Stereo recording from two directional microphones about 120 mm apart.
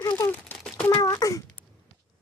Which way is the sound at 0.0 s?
25° left (ahead or behind).